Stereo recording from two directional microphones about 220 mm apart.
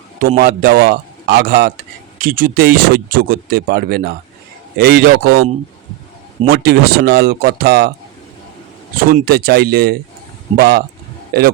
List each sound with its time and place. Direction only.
0.2 s a man's voice: 45° right (ahead or behind)
6.5 s a man's voice: 45° right (ahead or behind)
9.0 s a man's voice: 40° right (ahead or behind)